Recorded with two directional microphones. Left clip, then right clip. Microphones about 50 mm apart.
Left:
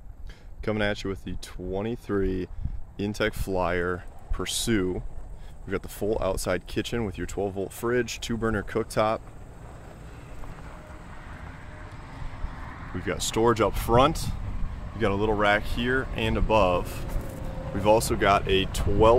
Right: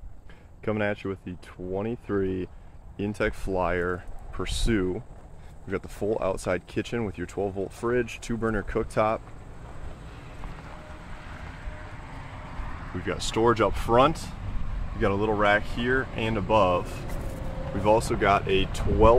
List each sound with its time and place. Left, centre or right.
0.7 s speech: left
1.8 s speech: left
3.1 s speech: left
8.4 s speech: left
11.4 s vehicle: centre
12.9 s speech: left
17.1 s vehicle: centre
17.8 s speech: left